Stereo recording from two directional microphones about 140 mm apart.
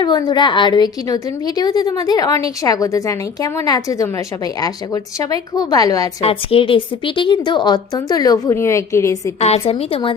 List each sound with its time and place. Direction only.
0.0 s a woman's voice: 30° left (ahead or behind)
5.2 s a woman's voice: 25° left (ahead or behind)
6.2 s a woman's voice: 40° left (ahead or behind); by 9.3 s 20° left (ahead or behind)
9.4 s a woman's voice: 50° left (ahead or behind)